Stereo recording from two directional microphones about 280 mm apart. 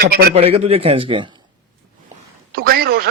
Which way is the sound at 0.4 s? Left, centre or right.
Right.